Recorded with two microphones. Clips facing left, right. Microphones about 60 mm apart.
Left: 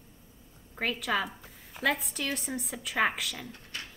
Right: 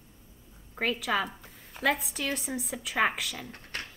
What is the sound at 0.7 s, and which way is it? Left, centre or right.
A woman's voice, centre.